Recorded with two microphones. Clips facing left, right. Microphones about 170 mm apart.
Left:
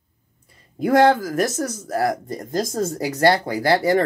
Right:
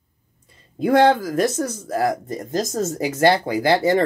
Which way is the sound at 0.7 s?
25° right (ahead or behind).